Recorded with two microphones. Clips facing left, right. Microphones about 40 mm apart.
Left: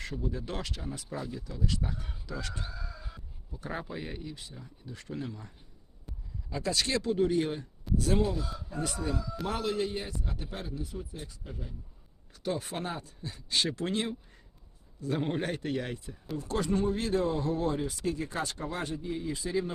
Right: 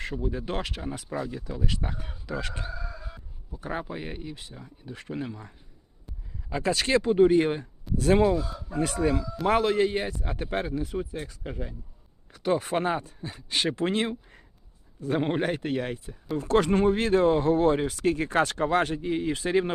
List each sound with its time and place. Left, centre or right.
0.0 s speech: right
2.6 s chicken: centre
3.0 s a sound: centre
3.5 s speech: right
8.4 s speech: centre
8.7 s speech: right
12.3 s speech: right; by 16.1 s centre
16.4 s speech: right